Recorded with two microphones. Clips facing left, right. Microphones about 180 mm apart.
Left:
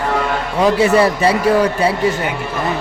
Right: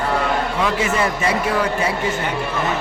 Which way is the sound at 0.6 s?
35° left (ahead or behind).